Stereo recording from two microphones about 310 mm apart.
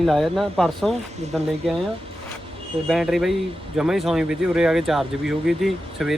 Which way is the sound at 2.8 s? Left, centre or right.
Centre.